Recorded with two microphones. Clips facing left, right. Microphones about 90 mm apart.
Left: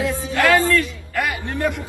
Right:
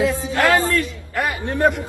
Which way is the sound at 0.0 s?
25° right (ahead or behind).